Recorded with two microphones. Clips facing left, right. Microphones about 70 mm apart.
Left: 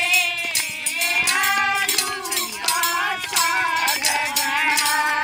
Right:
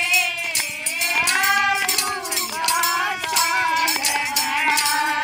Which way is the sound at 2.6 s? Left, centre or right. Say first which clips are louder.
Right 2 dB; centre.